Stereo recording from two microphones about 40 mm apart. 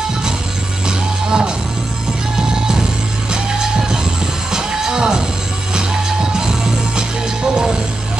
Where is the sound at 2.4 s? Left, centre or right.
Centre.